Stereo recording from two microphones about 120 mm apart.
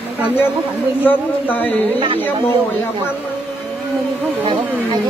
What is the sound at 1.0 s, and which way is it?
Speech, 15° left (ahead or behind).